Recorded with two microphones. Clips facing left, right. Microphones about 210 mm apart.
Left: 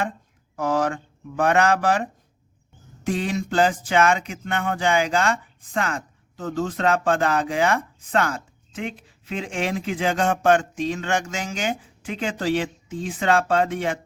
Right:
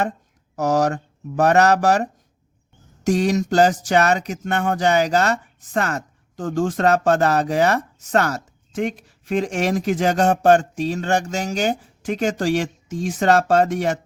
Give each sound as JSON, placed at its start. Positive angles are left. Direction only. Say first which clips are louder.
{"t": 0.5, "sound": "speech", "louder": "right 4 dB", "side_deg": -45}